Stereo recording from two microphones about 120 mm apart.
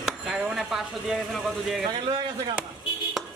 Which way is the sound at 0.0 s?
5° right (ahead or behind).